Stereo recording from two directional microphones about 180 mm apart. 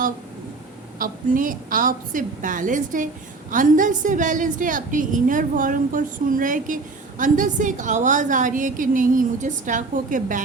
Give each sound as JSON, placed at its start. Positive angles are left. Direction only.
{"t": 0.9, "sound": "a woman's voice", "side_deg": -50}